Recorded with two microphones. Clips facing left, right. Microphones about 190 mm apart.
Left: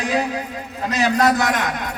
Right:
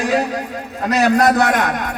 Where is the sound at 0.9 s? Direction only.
60° right (ahead or behind).